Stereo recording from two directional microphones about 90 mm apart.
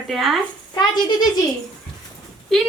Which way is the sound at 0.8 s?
50° left (ahead or behind).